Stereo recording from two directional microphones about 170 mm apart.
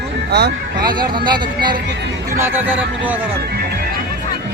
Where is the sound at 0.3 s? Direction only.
75° right (ahead or behind).